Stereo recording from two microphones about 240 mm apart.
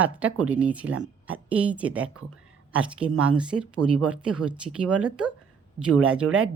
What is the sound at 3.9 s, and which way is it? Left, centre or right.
Speech, right.